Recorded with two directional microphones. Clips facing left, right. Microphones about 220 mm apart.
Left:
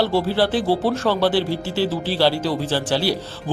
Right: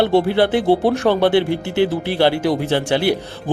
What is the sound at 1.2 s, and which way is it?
Speech, 60° right (ahead or behind).